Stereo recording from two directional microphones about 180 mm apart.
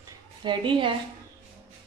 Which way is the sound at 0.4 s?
25° right (ahead or behind).